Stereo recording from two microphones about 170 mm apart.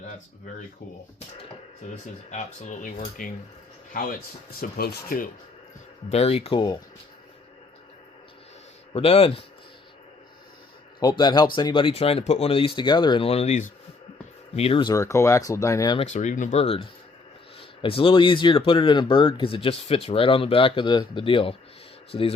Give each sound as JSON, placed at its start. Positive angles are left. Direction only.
{"t": 2.3, "sound": "speech", "side_deg": 45}
{"t": 6.1, "sound": "speech", "side_deg": 35}
{"t": 8.9, "sound": "speech", "side_deg": 35}
{"t": 11.0, "sound": "speech", "side_deg": 25}
{"t": 14.9, "sound": "speech", "side_deg": 15}
{"t": 16.0, "sound": "speech", "side_deg": 45}